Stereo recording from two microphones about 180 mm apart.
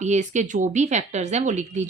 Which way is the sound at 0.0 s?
40° right (ahead or behind).